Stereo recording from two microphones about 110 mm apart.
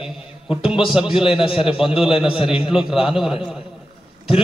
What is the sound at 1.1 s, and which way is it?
Speech, 55° left (ahead or behind).